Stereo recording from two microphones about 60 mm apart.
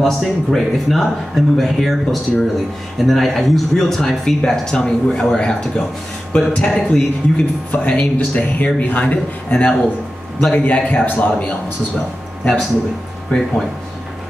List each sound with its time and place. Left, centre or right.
0.0 s speech: centre; by 11.5 s left
13.3 s speech: left